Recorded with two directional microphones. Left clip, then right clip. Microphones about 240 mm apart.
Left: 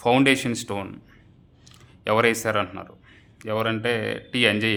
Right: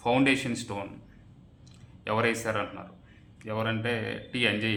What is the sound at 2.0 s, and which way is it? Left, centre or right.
A man's voice, left.